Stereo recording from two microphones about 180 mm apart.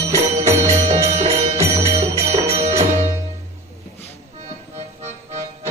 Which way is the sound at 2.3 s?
35° right (ahead or behind).